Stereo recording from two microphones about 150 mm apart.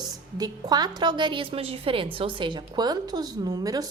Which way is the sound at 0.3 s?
25° right (ahead or behind).